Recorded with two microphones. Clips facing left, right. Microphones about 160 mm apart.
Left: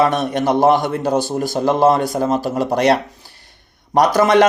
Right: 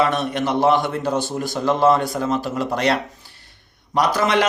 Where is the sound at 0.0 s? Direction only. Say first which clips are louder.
Left 4 dB; 40° left (ahead or behind).